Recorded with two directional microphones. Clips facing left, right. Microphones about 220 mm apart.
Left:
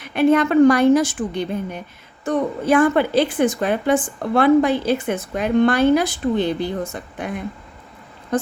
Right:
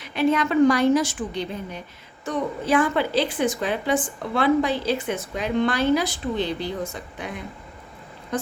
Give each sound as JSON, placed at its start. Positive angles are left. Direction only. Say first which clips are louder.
{"t": 0.0, "sound": "a woman's voice", "louder": "left 6 dB", "side_deg": 55}